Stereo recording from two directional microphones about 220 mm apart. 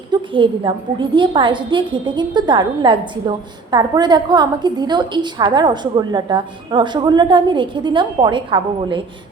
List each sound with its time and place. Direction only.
0.1 s a woman's voice: 20° right (ahead or behind)